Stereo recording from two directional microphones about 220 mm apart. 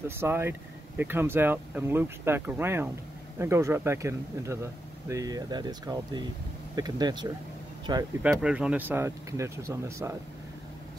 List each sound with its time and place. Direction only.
0.1 s speech: 10° right (ahead or behind)
8.2 s speech: 5° right (ahead or behind)